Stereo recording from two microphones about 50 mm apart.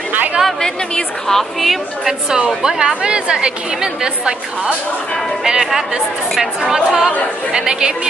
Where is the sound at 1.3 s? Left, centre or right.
Centre.